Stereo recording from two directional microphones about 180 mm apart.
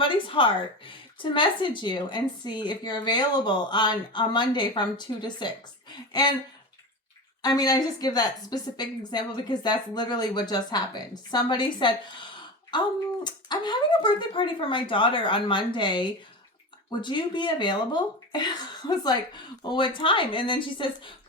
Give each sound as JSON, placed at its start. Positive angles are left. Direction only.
{"t": 0.0, "sound": "speech", "side_deg": 30}
{"t": 7.4, "sound": "speech", "side_deg": 20}